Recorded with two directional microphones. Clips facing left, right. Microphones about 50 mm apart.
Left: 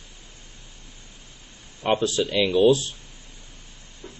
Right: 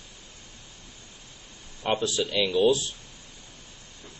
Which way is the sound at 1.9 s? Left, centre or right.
Left.